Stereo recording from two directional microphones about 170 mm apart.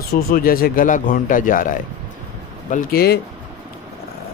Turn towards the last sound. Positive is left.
turn(degrees=65)  # may be behind; listen again after turning